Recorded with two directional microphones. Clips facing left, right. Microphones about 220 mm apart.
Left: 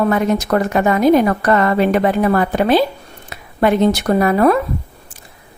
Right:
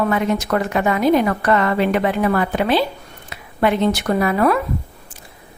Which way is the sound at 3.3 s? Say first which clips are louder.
Left 3 dB; 45° left (ahead or behind).